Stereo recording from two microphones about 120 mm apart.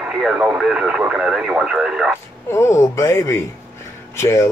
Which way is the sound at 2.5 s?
25° left (ahead or behind).